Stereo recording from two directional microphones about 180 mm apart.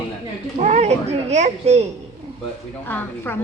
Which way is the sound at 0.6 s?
40° right (ahead or behind).